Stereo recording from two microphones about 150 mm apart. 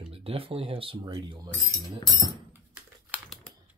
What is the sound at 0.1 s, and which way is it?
Speech, 40° right (ahead or behind).